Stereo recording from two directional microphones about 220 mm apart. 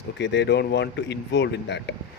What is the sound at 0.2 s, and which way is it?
Speech, 50° left (ahead or behind).